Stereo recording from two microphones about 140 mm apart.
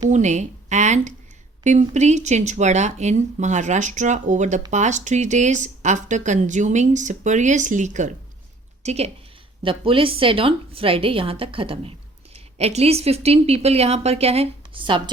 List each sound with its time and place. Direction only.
0.1 s a woman's voice: 55° right (ahead or behind)
9.6 s a woman's voice: 40° right (ahead or behind)